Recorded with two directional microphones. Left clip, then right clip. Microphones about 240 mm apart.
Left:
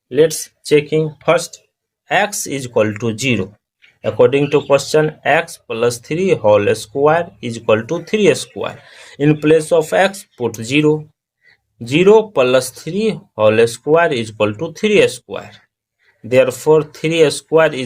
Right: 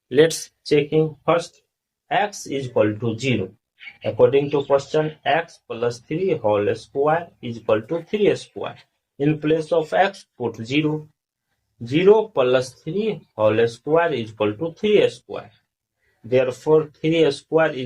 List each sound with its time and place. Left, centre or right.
0.1 s speech: left